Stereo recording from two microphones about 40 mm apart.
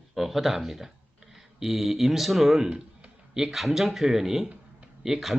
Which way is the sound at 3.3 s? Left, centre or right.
Centre.